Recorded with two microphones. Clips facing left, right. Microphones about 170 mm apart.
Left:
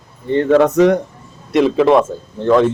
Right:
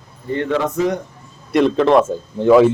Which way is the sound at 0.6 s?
75° left (ahead or behind).